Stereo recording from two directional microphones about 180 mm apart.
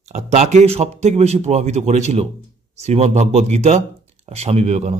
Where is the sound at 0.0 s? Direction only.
40° right (ahead or behind).